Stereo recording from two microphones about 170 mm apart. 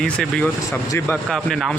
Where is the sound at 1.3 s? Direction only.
Centre (ahead or behind).